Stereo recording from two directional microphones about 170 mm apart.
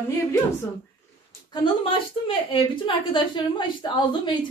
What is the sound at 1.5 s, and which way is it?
A woman's voice, 30° left (ahead or behind).